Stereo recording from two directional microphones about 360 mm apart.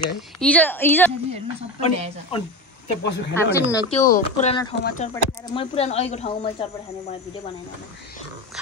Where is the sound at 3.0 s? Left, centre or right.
Left.